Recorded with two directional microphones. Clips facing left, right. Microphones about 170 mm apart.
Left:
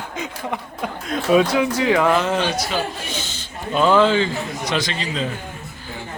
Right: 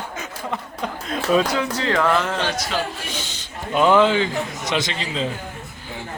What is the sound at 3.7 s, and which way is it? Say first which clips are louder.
A man's voice: even; 15° right (ahead or behind).